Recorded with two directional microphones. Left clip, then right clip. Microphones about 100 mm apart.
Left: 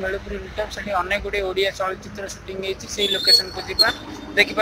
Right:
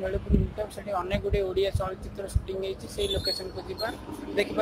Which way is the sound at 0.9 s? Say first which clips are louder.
Left 6 dB; 5° right (ahead or behind).